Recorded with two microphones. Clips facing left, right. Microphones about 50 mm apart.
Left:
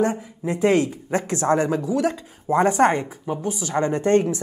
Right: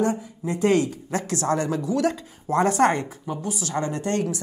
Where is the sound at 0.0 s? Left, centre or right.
Centre.